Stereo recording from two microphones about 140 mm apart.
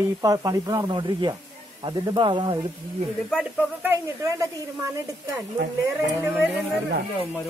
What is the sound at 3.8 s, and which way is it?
Speech, 20° right (ahead or behind).